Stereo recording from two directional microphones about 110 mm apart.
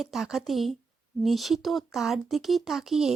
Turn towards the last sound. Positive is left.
turn(degrees=-5)  # may be behind; listen again after turning